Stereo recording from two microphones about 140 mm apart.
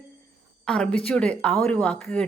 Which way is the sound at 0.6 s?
5° left (ahead or behind).